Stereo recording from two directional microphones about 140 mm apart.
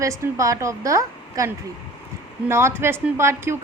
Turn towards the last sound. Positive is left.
turn(degrees=-20)  # may be behind; listen again after turning